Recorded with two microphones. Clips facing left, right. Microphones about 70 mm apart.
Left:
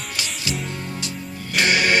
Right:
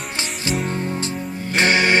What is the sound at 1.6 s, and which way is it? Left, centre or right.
Music, right.